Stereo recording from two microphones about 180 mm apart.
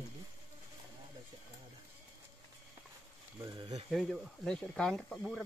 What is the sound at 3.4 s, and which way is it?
Speech, 25° right (ahead or behind).